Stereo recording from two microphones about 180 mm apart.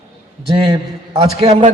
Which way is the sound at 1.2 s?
35° right (ahead or behind).